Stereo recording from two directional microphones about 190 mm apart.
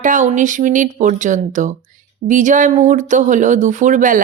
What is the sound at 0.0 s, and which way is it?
A woman's voice, 40° right (ahead or behind).